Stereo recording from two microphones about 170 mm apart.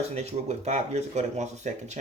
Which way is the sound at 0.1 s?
40° right (ahead or behind).